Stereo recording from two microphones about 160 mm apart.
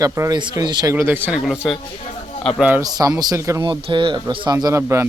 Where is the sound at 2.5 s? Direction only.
10° right (ahead or behind).